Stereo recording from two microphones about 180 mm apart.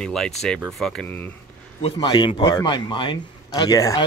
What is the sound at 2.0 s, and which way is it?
Speech, 25° left (ahead or behind).